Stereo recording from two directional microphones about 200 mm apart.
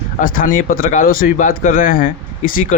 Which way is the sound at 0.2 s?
45° left (ahead or behind).